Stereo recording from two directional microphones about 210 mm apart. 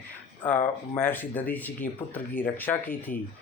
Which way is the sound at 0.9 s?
10° left (ahead or behind).